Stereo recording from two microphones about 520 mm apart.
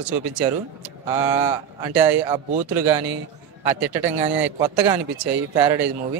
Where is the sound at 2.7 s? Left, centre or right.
Right.